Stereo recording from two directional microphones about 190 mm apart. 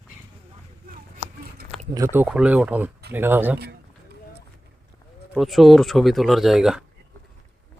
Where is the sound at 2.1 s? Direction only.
5° right (ahead or behind).